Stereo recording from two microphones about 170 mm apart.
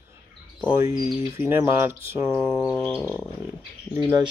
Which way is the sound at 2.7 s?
10° left (ahead or behind).